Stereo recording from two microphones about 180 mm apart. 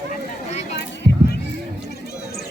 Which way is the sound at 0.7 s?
70° left (ahead or behind).